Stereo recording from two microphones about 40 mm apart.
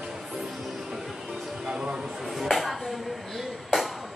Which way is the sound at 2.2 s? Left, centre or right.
Centre.